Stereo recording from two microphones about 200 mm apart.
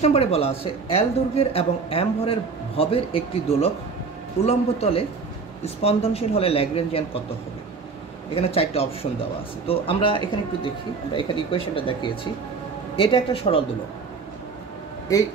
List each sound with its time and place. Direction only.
0.0 s a man's voice: 30° left (ahead or behind)
8.4 s speech: 30° left (ahead or behind)
15.1 s a man's voice: 15° left (ahead or behind)